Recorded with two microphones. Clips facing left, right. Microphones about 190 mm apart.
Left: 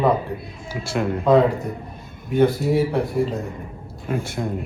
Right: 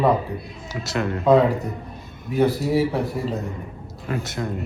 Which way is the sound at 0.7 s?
10° left (ahead or behind).